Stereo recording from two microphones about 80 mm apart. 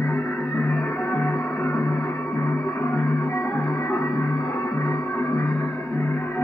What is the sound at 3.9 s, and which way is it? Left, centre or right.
Music, left.